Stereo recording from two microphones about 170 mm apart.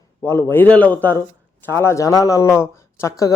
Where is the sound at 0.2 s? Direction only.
15° left (ahead or behind).